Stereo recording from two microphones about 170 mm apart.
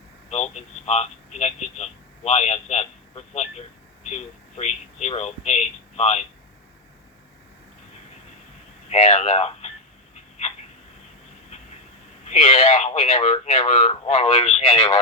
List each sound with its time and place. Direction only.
0.3 s a man's voice: 40° left (ahead or behind)
8.9 s speech: 35° left (ahead or behind)
12.2 s speech: 40° left (ahead or behind)